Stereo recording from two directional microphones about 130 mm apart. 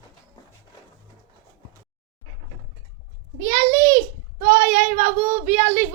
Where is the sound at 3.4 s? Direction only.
25° right (ahead or behind).